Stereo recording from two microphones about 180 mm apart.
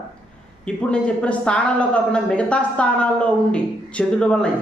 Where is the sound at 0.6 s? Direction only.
5° left (ahead or behind).